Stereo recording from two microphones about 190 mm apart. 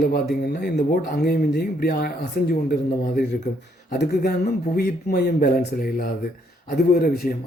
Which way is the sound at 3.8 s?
55° left (ahead or behind).